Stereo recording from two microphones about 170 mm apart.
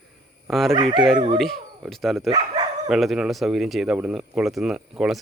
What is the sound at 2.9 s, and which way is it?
Speech, centre (ahead or behind).